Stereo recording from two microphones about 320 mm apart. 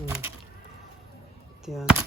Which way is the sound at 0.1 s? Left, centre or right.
Centre.